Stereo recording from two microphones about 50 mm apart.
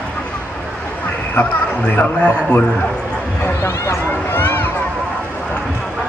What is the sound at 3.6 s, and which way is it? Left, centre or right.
Speech, left.